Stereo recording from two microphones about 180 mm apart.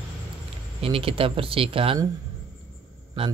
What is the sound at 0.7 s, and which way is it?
Speech, 30° right (ahead or behind).